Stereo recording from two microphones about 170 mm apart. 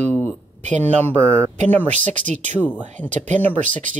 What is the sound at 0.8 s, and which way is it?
Speech, 10° left (ahead or behind).